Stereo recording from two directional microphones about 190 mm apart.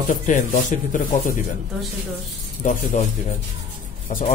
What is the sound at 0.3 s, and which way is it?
Speech, 40° left (ahead or behind).